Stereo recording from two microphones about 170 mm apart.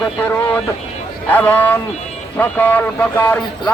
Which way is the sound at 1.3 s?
10° left (ahead or behind).